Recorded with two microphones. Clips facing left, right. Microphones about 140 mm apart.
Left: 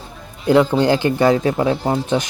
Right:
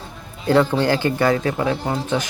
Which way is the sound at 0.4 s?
15° left (ahead or behind).